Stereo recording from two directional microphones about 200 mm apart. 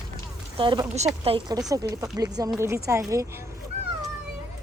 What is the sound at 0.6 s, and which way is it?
Speech, 25° right (ahead or behind).